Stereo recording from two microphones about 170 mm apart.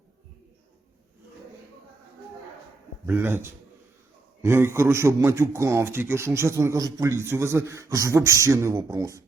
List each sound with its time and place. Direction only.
3.1 s a man's voice: 10° right (ahead or behind)
4.4 s a man's voice: 15° right (ahead or behind)